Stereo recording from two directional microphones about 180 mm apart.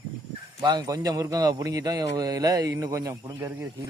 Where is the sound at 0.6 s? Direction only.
20° right (ahead or behind).